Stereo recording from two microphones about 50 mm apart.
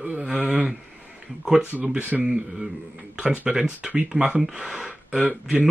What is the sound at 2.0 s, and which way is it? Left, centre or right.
Speech, right.